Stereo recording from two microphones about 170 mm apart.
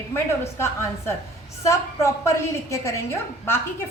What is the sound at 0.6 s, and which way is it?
A woman's voice, 15° left (ahead or behind).